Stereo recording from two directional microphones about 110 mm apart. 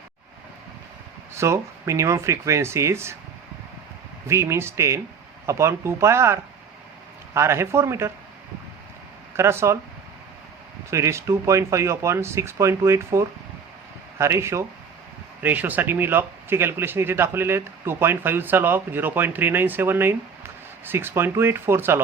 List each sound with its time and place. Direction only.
1.3 s speech: 25° right (ahead or behind)
4.3 s speech: 25° right (ahead or behind)
9.3 s speech: 25° right (ahead or behind)
10.9 s speech: 25° right (ahead or behind)
15.4 s speech: 15° right (ahead or behind)